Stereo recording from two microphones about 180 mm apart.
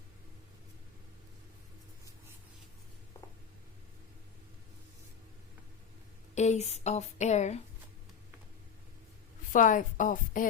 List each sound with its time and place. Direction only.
6.3 s a woman's voice: 40° left (ahead or behind)
9.5 s speech: 45° left (ahead or behind)